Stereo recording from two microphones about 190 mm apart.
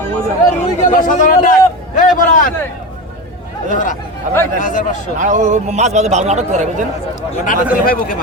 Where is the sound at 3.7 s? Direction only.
45° left (ahead or behind).